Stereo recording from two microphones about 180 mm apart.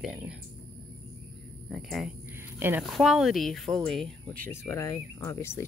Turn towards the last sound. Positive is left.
turn(degrees=15)  # may be behind; listen again after turning